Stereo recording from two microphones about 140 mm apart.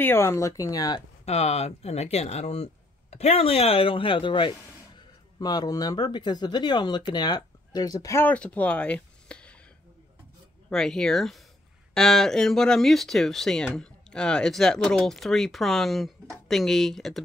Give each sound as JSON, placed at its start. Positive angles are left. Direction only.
{"t": 0.0, "sound": "speech", "side_deg": 15}
{"t": 1.2, "sound": "speech", "side_deg": 50}
{"t": 8.3, "sound": "speech", "side_deg": 10}
{"t": 10.7, "sound": "speech", "side_deg": 5}